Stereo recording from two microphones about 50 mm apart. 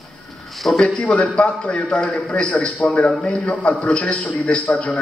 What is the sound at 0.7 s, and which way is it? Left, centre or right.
A man's voice, left.